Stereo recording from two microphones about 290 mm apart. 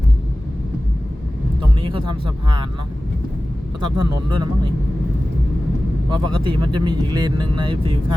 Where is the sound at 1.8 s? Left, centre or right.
Centre.